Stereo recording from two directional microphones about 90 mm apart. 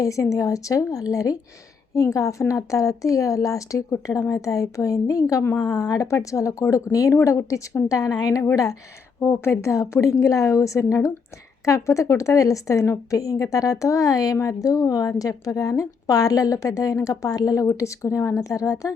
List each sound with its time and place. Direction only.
0.0 s a woman's voice: 35° left (ahead or behind)